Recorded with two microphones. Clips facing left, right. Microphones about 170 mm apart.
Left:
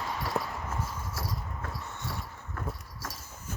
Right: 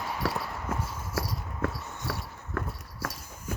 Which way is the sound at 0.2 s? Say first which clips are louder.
Right 1 dB; 75° right (ahead or behind).